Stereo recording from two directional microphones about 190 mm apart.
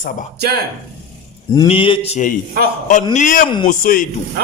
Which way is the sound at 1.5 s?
25° left (ahead or behind).